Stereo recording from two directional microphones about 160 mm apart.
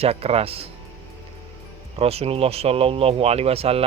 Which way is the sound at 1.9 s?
40° right (ahead or behind).